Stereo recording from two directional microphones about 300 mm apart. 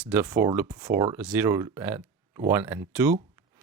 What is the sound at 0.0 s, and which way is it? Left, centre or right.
Speech, centre.